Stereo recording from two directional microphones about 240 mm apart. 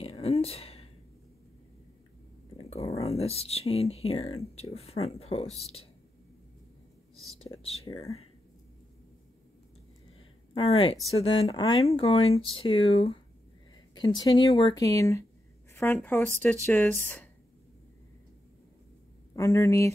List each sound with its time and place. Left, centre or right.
0.0 s a sound: left
2.5 s speech: left
7.5 s speech: left
10.5 s speech: left
19.3 s speech: centre